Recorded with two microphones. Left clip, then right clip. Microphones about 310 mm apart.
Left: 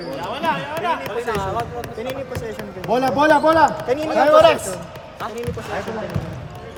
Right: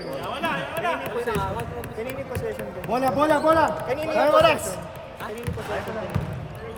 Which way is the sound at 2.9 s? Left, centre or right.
Left.